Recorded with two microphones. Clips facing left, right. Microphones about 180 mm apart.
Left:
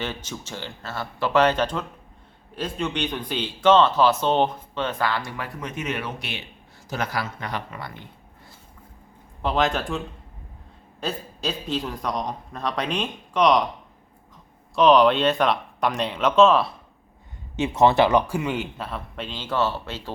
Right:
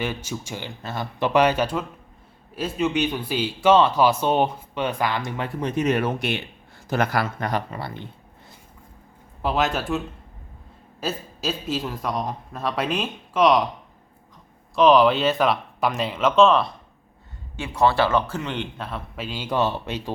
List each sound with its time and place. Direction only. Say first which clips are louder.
0.0 s speech: right 3 dB; 10° right (ahead or behind); by 7.6 s 50° right (ahead or behind)
7.7 s speech: right 4 dB; 30° right (ahead or behind)
9.4 s a man's voice: even; 5° right (ahead or behind)
11.0 s a man's voice: right 1 dB; 5° right (ahead or behind)
14.8 s a man's voice: even; centre (ahead or behind)
17.6 s a man's voice: left 2 dB; 20° left (ahead or behind); by 20.1 s 15° right (ahead or behind)